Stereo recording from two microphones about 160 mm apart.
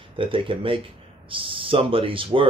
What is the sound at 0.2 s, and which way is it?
Speech, 35° right (ahead or behind).